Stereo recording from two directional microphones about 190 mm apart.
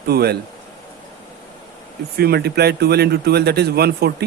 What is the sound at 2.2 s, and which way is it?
Speech, 55° right (ahead or behind).